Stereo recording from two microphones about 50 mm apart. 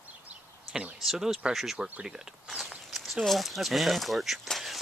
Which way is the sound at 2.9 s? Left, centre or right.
Centre.